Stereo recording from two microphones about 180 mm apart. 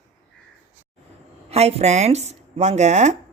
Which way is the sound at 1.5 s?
35° right (ahead or behind).